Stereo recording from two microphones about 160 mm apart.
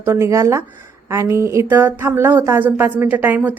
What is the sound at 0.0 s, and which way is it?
Speech, 15° right (ahead or behind).